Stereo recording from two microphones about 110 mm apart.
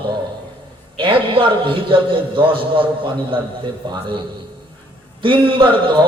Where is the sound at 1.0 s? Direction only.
50° right (ahead or behind).